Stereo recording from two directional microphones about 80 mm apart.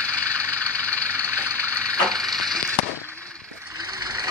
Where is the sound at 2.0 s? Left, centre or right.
Centre.